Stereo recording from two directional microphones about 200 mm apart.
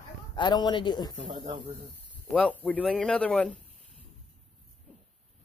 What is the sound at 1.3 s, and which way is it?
Speech, 25° right (ahead or behind).